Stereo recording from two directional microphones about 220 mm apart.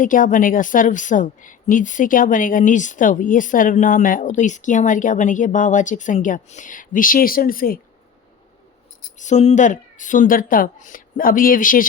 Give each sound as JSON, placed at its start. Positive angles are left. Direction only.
{"t": 0.0, "sound": "a woman's voice", "side_deg": 35}
{"t": 9.1, "sound": "a woman's voice", "side_deg": 35}